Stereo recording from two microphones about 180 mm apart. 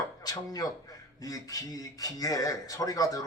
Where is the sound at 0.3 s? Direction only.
20° left (ahead or behind).